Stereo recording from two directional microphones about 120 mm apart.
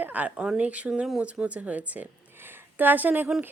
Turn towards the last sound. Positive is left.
turn(degrees=-15)  # may be behind; listen again after turning